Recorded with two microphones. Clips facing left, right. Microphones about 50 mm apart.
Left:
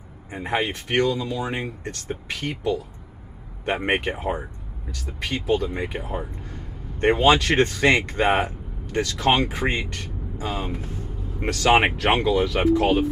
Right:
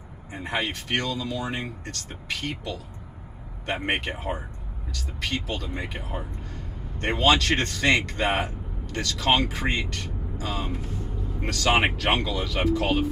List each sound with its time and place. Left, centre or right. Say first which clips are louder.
0.3 s speech: left 4 dB; left
5.9 s speech: left 5 dB; centre
7.0 s speech: left 4 dB; centre